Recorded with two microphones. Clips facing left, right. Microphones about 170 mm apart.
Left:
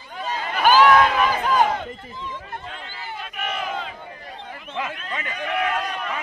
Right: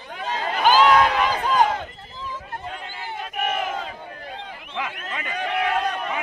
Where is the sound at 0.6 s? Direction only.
20° right (ahead or behind).